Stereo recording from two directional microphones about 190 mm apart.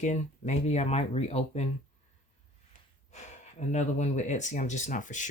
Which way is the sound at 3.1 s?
35° left (ahead or behind).